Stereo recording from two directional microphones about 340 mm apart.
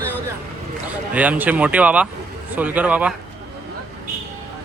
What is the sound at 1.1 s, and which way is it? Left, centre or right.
Speech, centre.